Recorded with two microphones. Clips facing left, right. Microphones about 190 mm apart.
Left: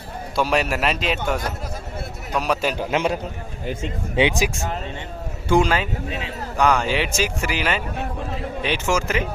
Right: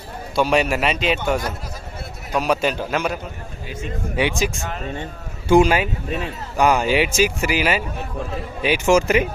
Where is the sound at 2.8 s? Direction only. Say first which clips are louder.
Left 1 dB; 20° left (ahead or behind).